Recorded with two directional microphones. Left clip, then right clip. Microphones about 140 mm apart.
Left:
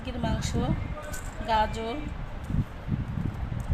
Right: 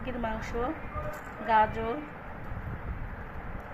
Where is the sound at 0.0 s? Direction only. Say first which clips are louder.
Left 1 dB; 15° left (ahead or behind).